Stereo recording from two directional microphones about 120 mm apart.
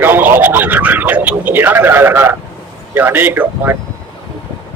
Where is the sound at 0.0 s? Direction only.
15° right (ahead or behind).